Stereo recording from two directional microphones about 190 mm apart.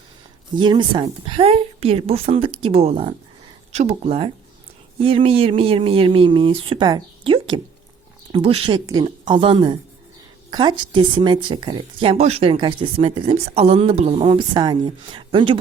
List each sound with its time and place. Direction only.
0.5 s speech: 25° right (ahead or behind)